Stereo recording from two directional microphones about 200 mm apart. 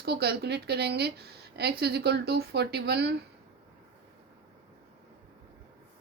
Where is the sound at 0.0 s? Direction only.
55° right (ahead or behind).